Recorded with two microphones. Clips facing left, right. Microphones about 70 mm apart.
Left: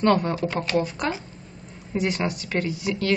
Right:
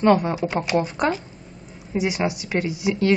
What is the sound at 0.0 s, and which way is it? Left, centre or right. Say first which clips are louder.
A woman's voice: right 3 dB; centre.